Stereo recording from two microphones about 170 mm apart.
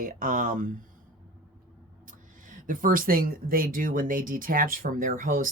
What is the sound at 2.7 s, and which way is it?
Speech, 55° right (ahead or behind).